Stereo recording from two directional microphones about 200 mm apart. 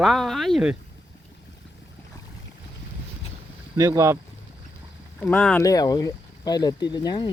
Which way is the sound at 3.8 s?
15° right (ahead or behind).